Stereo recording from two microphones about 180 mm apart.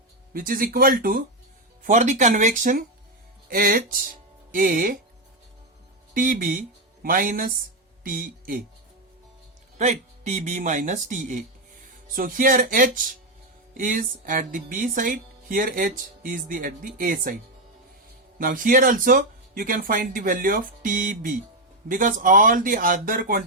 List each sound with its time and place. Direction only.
0.3 s music: 50° right (ahead or behind)
1.8 s music: 40° right (ahead or behind)
6.1 s speech: 50° right (ahead or behind)
9.7 s music: 40° right (ahead or behind)
18.3 s music: 50° right (ahead or behind)